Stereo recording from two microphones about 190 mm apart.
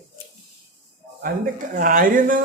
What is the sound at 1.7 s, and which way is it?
Speech, 45° right (ahead or behind).